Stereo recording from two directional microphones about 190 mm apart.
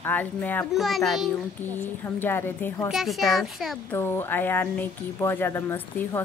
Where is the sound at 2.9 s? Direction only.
Centre (ahead or behind).